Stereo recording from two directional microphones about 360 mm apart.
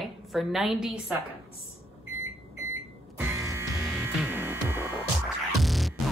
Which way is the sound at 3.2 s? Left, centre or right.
Centre.